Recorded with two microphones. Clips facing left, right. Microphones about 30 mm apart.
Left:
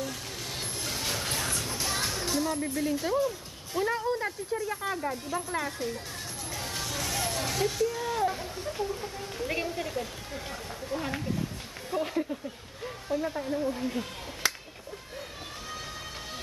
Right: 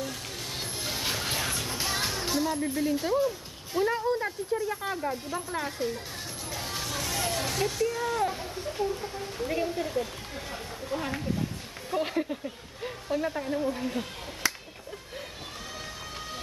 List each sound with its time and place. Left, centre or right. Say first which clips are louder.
0.6 s music: right 1 dB; centre
2.8 s speech: right 2 dB; centre
6.5 s music: right 1 dB; centre
7.8 s speech: right 2 dB; centre
12.0 s a woman's voice: right 1 dB; right